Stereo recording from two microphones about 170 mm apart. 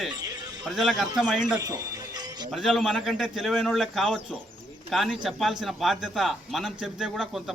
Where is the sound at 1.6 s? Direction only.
20° right (ahead or behind).